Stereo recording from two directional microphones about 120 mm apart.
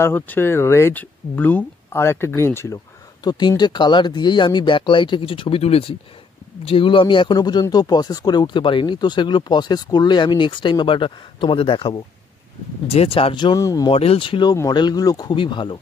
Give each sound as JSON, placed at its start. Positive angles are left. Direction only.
{"t": 0.0, "sound": "speech", "side_deg": 20}
{"t": 3.3, "sound": "speech", "side_deg": 35}
{"t": 12.8, "sound": "speech", "side_deg": 60}
{"t": 13.6, "sound": "speech", "side_deg": 30}
{"t": 13.9, "sound": "speech", "side_deg": 55}
{"t": 14.5, "sound": "speech", "side_deg": 35}